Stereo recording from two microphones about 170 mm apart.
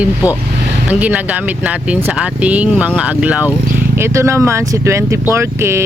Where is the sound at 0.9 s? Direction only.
10° right (ahead or behind).